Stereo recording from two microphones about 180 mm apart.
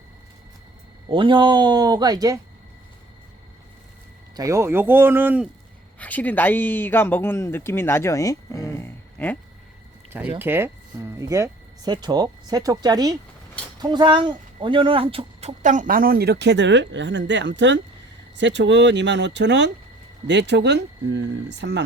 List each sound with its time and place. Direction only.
1.0 s speech: 30° right (ahead or behind)
4.4 s speech: 15° right (ahead or behind)
6.0 s speech: 10° left (ahead or behind)
10.1 s speech: 10° right (ahead or behind); by 21.8 s 75° right (ahead or behind)